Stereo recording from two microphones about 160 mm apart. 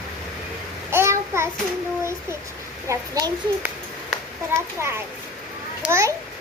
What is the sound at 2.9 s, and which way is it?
A child's voice, 15° right (ahead or behind).